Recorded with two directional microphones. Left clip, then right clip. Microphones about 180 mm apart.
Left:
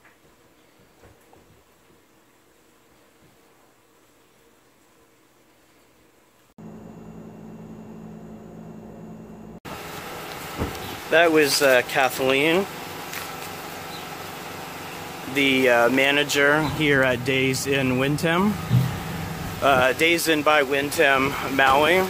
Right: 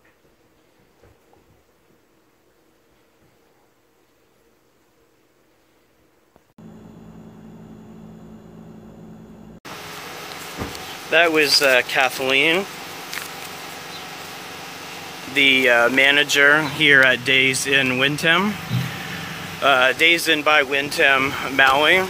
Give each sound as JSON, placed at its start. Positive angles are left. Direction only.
{"t": 11.1, "sound": "speech", "side_deg": 10}
{"t": 13.2, "sound": "a sound", "side_deg": 10}
{"t": 15.3, "sound": "speech", "side_deg": 5}
{"t": 19.6, "sound": "speech", "side_deg": 5}